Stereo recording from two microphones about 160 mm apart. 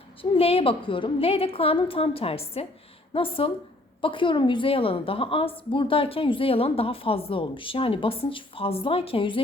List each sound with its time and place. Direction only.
0.2 s a woman's voice: 40° left (ahead or behind)